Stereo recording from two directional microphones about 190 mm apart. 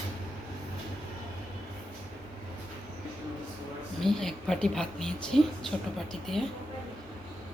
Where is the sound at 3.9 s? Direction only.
Centre (ahead or behind).